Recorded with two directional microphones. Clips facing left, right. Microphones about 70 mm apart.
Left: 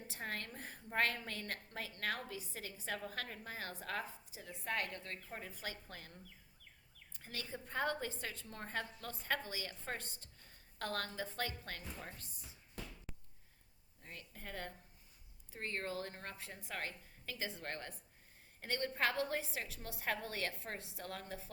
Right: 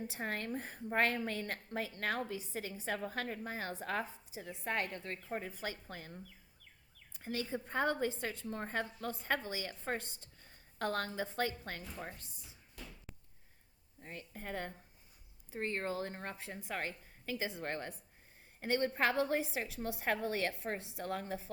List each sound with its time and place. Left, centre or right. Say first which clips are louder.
0.1 s a woman's voice: right 6 dB; right
7.1 s a woman's voice: right 8 dB; right
14.0 s a woman's voice: right 5 dB; right